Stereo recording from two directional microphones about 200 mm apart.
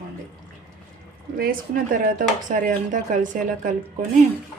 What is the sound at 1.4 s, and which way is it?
A woman's voice, 40° right (ahead or behind).